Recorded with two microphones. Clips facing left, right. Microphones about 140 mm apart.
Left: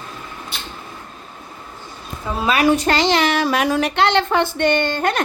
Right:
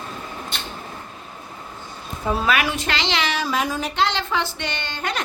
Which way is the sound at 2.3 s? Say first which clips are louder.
Right 2 dB; 20° right (ahead or behind).